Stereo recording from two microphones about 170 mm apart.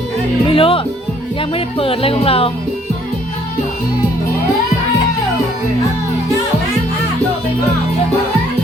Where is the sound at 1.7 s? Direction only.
35° left (ahead or behind).